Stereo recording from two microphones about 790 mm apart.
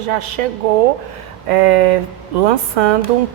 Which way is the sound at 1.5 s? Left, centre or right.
Right.